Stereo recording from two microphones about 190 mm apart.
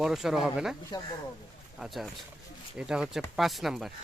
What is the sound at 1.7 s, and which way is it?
Speech, centre (ahead or behind).